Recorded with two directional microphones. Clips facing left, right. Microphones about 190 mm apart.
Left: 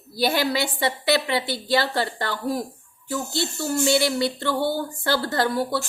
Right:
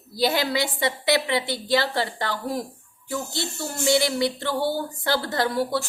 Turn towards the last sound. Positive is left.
turn(degrees=-15)  # may be behind; listen again after turning